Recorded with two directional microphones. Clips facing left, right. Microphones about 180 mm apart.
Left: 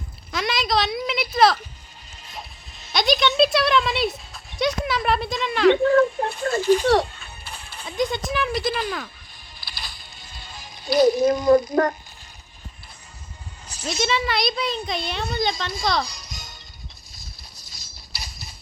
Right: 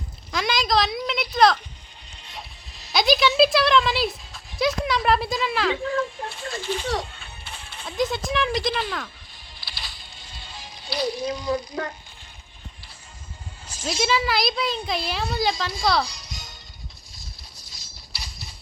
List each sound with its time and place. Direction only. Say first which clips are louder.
0.3 s a sound: even; centre (ahead or behind)
2.9 s a sound: right 1 dB; centre (ahead or behind)
4.5 s speech: even; centre (ahead or behind)
5.8 s speech: left 9 dB; 60° left (ahead or behind)
7.9 s a woman's voice: left 1 dB; centre (ahead or behind)
9.6 s music: left 1 dB; 45° left (ahead or behind)
14.0 s a woman's voice: even; centre (ahead or behind)
16.0 s music: left 1 dB; 45° left (ahead or behind)
17.9 s a sound: left 2 dB; 45° left (ahead or behind)